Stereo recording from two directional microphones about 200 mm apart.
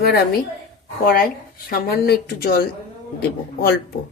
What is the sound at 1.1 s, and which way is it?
Speech, 50° left (ahead or behind).